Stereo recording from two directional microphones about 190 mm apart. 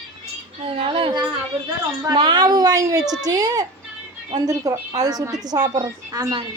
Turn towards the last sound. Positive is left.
turn(degrees=-20)  # may be behind; listen again after turning